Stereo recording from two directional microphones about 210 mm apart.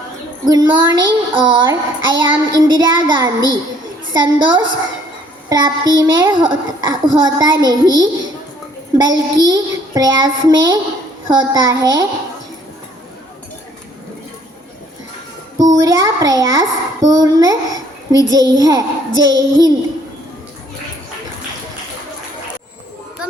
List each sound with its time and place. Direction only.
0.4 s child singing: 20° right (ahead or behind)
5.5 s a child's voice: 20° right (ahead or behind)
5.9 s child singing: 20° right (ahead or behind)
11.3 s a child's voice: 20° right (ahead or behind)
15.5 s a child's voice: 15° right (ahead or behind)